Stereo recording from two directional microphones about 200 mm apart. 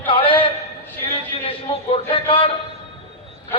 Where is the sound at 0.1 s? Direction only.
25° left (ahead or behind).